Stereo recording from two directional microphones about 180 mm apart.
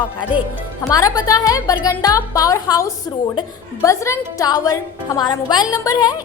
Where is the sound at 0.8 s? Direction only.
20° left (ahead or behind).